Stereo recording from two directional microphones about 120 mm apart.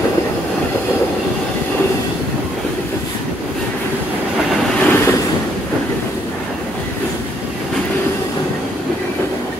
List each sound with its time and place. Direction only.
4.7 s vehicle: 15° left (ahead or behind)